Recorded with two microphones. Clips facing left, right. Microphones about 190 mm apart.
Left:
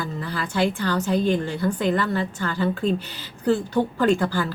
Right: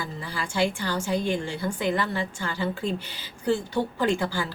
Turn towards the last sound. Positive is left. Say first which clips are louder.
# left 5 dB
turn(degrees=-10)  # may be behind; listen again after turning